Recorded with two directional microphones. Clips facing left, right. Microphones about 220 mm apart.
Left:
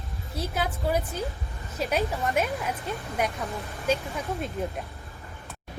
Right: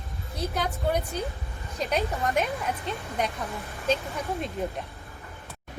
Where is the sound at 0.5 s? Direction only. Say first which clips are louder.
Even; 5° left (ahead or behind).